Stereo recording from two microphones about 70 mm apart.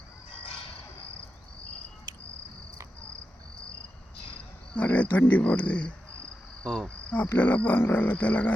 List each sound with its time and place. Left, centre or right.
4.7 s speech: left
6.8 s cricket: centre
7.3 s speech: left